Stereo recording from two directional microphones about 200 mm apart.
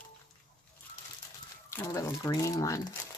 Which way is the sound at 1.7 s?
15° left (ahead or behind).